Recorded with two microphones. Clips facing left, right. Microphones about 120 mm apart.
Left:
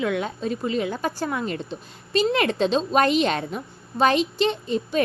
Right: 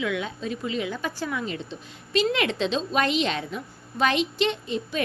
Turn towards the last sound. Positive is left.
turn(degrees=40)  # may be behind; listen again after turning